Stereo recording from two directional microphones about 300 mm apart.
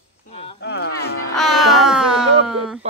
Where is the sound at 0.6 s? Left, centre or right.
Left.